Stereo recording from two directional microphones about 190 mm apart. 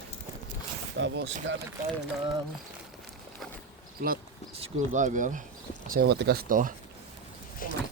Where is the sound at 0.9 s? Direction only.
70° right (ahead or behind).